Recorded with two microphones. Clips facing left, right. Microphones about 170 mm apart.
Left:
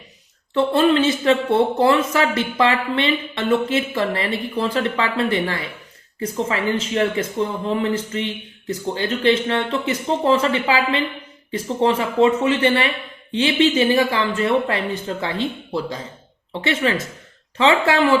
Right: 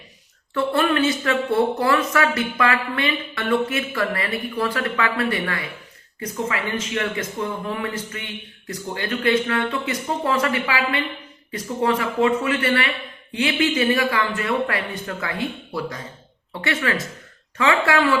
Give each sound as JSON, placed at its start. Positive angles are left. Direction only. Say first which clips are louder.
{"t": 0.5, "sound": "speech", "louder": "left 4 dB", "side_deg": 20}
{"t": 16.6, "sound": "speech", "louder": "left 3 dB", "side_deg": 25}